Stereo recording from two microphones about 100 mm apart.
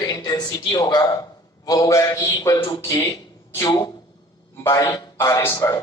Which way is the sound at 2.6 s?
50° left (ahead or behind).